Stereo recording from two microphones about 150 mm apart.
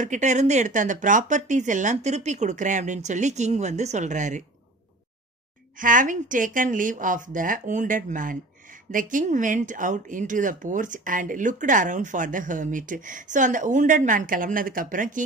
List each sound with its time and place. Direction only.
0.0 s speech: 55° right (ahead or behind)
5.8 s speech: 60° right (ahead or behind)